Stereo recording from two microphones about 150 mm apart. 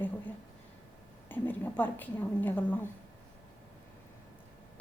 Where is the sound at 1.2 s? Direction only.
10° left (ahead or behind).